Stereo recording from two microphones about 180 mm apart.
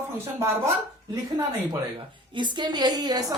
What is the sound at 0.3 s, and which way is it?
A man's voice, 15° right (ahead or behind).